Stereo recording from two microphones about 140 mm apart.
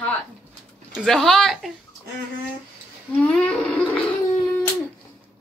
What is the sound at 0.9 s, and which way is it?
Speech, centre (ahead or behind).